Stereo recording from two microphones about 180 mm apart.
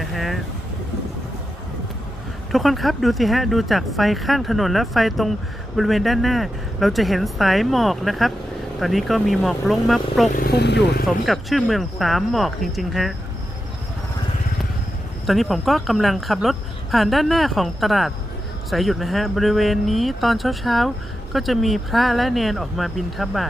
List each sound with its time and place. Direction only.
0.0 s vehicle: centre (ahead or behind)
2.5 s speech: centre (ahead or behind)
10.3 s speech: 60° left (ahead or behind)
11.0 s speech: centre (ahead or behind)
15.3 s speech: centre (ahead or behind)